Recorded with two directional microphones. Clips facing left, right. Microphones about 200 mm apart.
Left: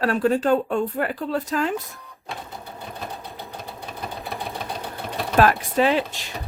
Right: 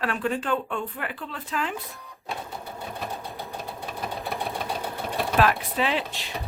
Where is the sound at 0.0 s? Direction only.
40° left (ahead or behind).